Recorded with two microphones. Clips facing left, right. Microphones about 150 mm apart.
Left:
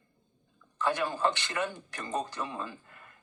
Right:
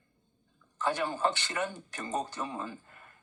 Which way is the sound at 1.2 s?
30° right (ahead or behind).